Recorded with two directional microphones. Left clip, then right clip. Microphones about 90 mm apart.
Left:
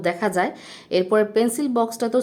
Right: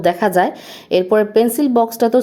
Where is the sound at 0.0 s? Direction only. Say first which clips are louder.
Right 7 dB; 25° right (ahead or behind).